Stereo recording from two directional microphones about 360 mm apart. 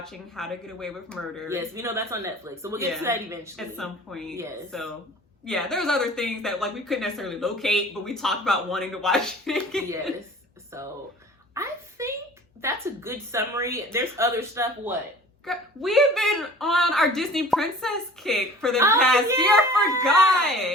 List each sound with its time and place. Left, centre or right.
0.0 s a man's voice: centre
11.5 s a sound: centre
12.6 s a man's voice: centre